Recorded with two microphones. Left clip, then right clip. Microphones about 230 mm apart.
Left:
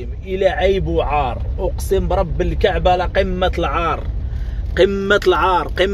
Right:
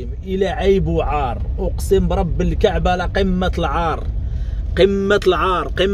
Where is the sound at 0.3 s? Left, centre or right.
Right.